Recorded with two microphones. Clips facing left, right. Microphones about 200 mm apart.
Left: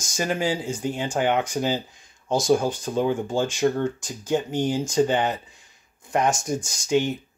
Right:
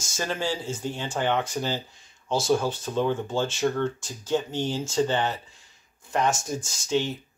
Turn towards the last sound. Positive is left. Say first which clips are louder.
# left 4 dB
turn(degrees=15)  # may be behind; listen again after turning